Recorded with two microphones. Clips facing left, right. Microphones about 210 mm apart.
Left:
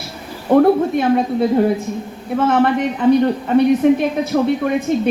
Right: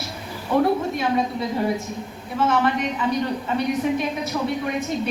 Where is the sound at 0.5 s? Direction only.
55° left (ahead or behind).